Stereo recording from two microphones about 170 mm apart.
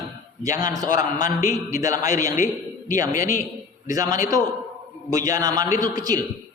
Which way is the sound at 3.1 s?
50° left (ahead or behind).